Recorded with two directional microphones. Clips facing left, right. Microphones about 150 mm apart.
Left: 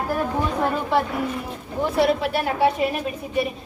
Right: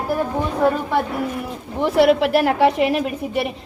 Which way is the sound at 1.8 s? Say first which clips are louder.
Right 5 dB; 85° right.